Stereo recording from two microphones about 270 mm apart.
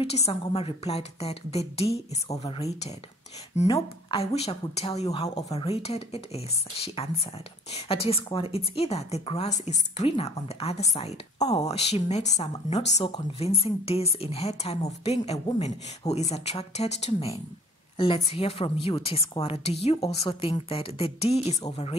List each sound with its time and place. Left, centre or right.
0.0 s a woman's voice: left